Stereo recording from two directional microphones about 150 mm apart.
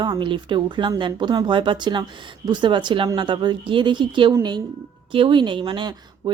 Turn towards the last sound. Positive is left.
turn(degrees=-35)  # may be behind; listen again after turning